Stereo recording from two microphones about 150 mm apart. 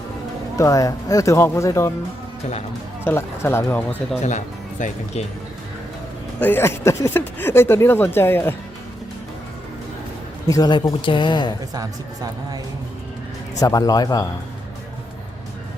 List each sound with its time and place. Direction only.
0.5 s speech: 20° left (ahead or behind)
3.0 s speech: 15° left (ahead or behind)
4.2 s speech: 50° left (ahead or behind)
6.4 s speech: 15° left (ahead or behind)
10.4 s speech: 25° left (ahead or behind)
11.7 s speech: 25° right (ahead or behind)
13.6 s speech: 25° left (ahead or behind)